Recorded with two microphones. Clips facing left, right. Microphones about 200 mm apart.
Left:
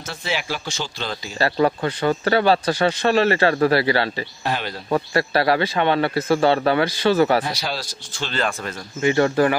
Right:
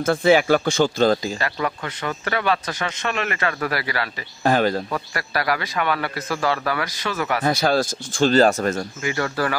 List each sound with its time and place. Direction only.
0.0 s a man's voice: 50° right (ahead or behind)
1.4 s speech: 30° left (ahead or behind)
4.4 s a man's voice: 45° right (ahead or behind)
4.9 s a man's voice: 30° left (ahead or behind)
7.4 s a man's voice: 50° right (ahead or behind)
9.0 s a man's voice: 25° left (ahead or behind)